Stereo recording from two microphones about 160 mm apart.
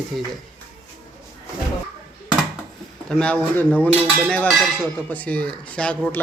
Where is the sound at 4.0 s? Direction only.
15° right (ahead or behind).